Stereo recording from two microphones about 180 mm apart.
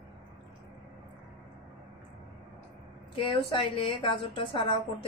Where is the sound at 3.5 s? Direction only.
30° left (ahead or behind).